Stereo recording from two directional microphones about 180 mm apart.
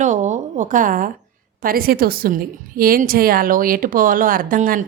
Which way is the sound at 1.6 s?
55° right (ahead or behind).